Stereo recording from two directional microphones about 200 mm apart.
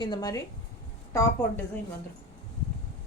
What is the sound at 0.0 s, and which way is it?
A woman's voice, 20° left (ahead or behind).